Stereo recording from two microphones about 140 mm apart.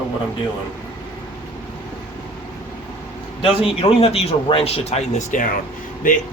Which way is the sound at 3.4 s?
40° left (ahead or behind).